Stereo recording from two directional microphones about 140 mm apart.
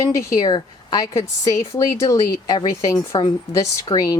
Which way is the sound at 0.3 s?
30° left (ahead or behind).